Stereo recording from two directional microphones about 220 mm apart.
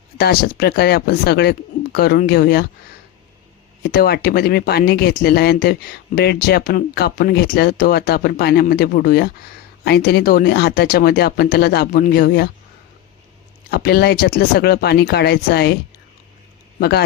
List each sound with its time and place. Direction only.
0.2 s speech: 45° left (ahead or behind)
3.8 s speech: 45° left (ahead or behind)
13.7 s speech: 45° left (ahead or behind)